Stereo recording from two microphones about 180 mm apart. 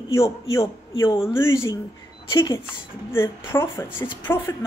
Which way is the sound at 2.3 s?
20° left (ahead or behind).